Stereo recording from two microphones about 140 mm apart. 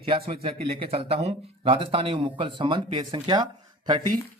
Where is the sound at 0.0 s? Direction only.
40° right (ahead or behind).